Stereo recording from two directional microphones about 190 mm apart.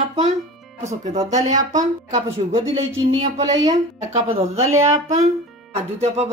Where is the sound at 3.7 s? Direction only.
35° right (ahead or behind).